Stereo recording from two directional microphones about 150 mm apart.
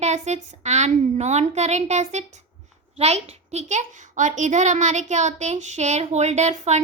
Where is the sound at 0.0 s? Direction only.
50° right (ahead or behind).